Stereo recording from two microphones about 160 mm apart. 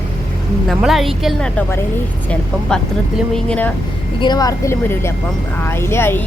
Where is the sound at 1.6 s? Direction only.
15° left (ahead or behind).